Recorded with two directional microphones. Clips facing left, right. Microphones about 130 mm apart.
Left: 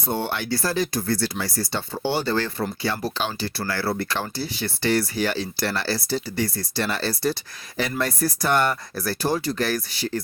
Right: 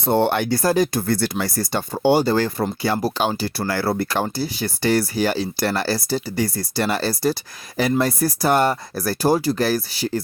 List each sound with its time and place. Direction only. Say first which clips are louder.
0.0 s speech: right 8 dB; 65° right (ahead or behind); by 10.1 s 35° right (ahead or behind)